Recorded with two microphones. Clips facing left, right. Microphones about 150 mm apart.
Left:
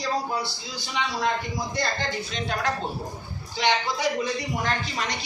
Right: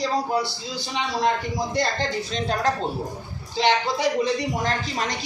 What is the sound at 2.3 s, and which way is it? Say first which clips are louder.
Speech: right 5 dB; 35° right (ahead or behind).